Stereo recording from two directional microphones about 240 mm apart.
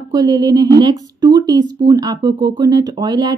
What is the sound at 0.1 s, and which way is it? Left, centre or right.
A woman's voice, centre.